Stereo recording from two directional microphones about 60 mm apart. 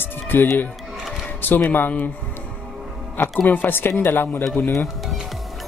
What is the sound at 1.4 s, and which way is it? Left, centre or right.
Speech, left.